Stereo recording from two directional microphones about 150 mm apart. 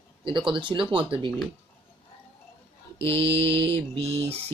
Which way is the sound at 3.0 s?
35° right (ahead or behind).